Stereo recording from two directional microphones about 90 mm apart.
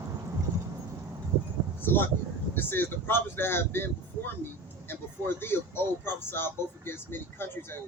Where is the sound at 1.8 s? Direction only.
25° left (ahead or behind).